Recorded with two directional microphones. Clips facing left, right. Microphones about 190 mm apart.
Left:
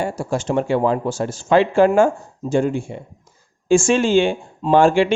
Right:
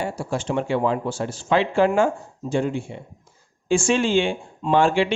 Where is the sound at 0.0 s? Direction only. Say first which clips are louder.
Left 4 dB; 45° left (ahead or behind).